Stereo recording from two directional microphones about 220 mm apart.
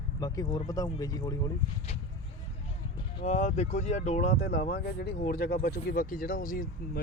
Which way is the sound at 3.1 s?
30° left (ahead or behind).